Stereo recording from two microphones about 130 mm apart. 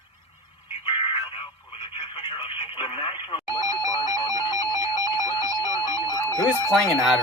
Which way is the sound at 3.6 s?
30° right (ahead or behind).